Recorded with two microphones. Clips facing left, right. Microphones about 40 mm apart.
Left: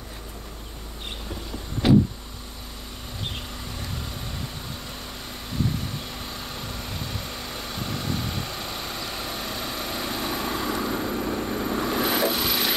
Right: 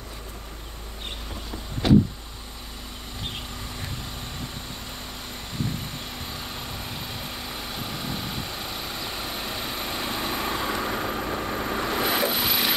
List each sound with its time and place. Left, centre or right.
1.8 s vehicle: centre
6.1 s vehicle: centre
10.7 s vehicle: right
11.8 s vehicle: centre